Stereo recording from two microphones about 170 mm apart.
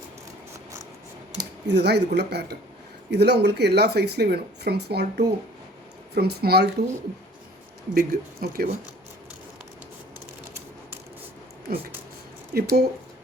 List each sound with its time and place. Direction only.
1.6 s speech: 80° right
7.9 s speech: 60° right (ahead or behind)
11.7 s speech: 60° right (ahead or behind)